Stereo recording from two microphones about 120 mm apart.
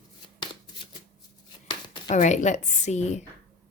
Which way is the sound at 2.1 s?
90° left.